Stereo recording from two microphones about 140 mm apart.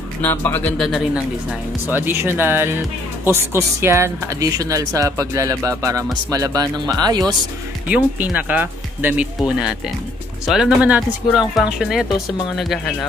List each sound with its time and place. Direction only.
0.2 s speech: 15° left (ahead or behind)
1.5 s speech: 15° right (ahead or behind)
7.9 s speech: 10° right (ahead or behind)